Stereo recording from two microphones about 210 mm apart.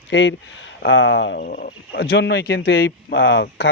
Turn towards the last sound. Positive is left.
turn(degrees=55)  # may be behind; listen again after turning